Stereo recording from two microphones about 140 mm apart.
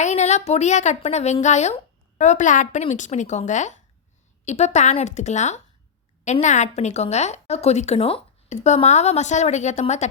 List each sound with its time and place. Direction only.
0.0 s a woman's voice: 55° left (ahead or behind)